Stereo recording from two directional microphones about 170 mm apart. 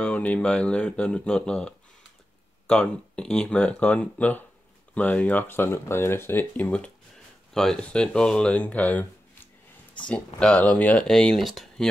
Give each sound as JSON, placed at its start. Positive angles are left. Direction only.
{"t": 0.0, "sound": "speech", "side_deg": 10}